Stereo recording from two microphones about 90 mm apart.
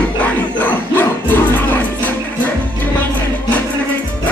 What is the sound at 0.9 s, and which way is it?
Music, 25° left (ahead or behind).